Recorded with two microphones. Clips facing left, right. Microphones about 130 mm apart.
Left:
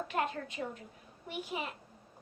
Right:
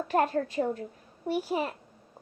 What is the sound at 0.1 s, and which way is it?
A child's voice, 40° right (ahead or behind).